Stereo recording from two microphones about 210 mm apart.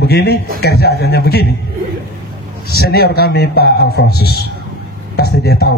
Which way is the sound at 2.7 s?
50° left (ahead or behind).